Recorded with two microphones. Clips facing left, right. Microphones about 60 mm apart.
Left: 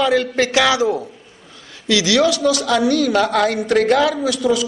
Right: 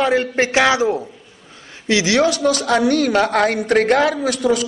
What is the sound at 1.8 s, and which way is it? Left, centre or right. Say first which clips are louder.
A woman's voice: even; right.